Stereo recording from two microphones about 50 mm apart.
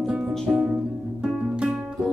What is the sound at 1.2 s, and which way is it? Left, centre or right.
Music, centre.